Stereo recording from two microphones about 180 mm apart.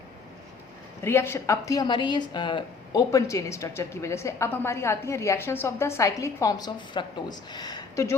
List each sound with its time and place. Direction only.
1.0 s a woman's voice: 15° left (ahead or behind)